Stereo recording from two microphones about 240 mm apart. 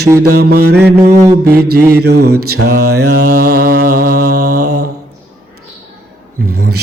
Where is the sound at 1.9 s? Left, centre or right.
Right.